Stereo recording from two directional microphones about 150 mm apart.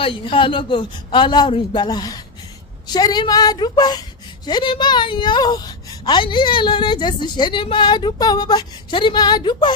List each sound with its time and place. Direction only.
0.0 s a woman's voice: 35° left (ahead or behind)